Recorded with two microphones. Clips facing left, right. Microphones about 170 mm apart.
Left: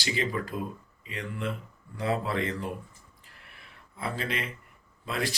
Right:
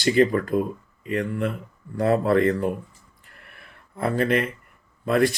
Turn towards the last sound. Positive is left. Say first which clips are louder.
# right 12 dB
turn(degrees=-55)  # may be behind; listen again after turning